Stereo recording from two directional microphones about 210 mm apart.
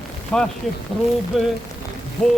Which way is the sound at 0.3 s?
5° left (ahead or behind).